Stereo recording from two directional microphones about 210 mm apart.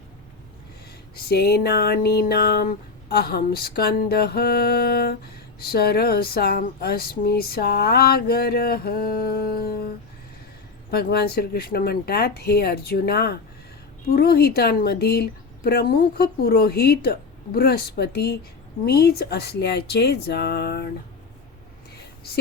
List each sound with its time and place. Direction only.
1.1 s speech: 50° left (ahead or behind)
10.9 s speech: 50° left (ahead or behind)